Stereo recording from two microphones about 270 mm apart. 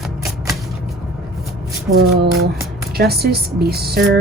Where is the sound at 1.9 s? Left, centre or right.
Right.